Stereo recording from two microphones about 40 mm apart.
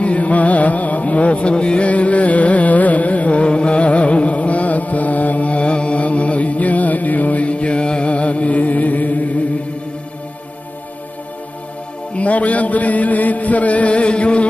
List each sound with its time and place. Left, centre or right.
0.0 s music: left
12.1 s music: left